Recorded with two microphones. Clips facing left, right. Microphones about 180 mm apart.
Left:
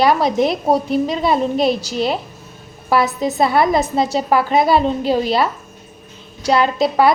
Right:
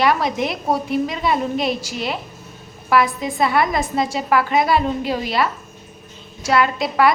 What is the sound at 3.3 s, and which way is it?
Speech, 30° left (ahead or behind).